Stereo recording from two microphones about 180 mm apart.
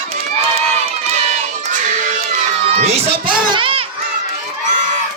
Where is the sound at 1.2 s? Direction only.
40° right (ahead or behind).